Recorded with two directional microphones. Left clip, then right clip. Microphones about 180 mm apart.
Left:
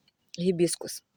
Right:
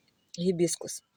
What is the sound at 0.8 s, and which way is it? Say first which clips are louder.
Speech: left 1 dB; centre (ahead or behind).